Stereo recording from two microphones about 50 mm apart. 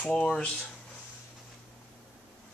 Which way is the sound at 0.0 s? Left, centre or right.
Centre.